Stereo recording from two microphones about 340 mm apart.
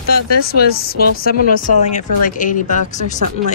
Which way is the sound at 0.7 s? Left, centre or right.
Left.